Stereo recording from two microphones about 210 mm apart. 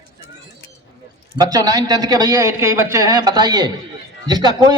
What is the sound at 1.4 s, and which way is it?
A man's voice, 15° right (ahead or behind).